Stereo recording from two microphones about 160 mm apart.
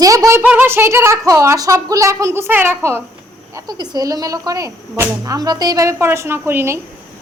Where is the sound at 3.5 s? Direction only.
25° right (ahead or behind).